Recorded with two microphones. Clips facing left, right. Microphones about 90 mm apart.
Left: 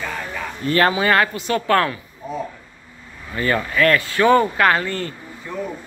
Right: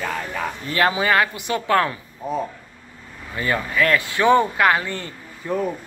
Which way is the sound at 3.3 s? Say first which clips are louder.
Left 2 dB; 5° right (ahead or behind).